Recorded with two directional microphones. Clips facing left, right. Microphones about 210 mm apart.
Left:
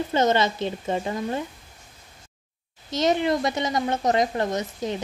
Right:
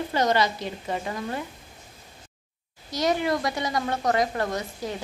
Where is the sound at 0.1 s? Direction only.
25° left (ahead or behind).